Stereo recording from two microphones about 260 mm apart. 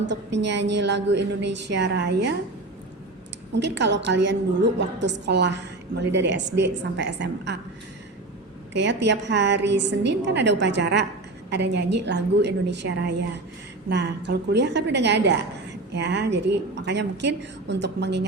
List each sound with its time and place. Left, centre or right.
0.1 s a woman's voice: right
3.5 s a woman's voice: right
8.7 s a woman's voice: right